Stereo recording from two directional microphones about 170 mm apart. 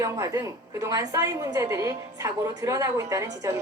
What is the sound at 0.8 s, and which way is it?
A man's voice, 20° right (ahead or behind).